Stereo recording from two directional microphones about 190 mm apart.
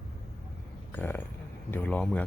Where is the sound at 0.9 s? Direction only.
10° left (ahead or behind).